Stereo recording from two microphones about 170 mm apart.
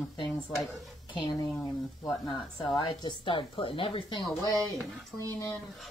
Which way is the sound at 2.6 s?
25° left (ahead or behind).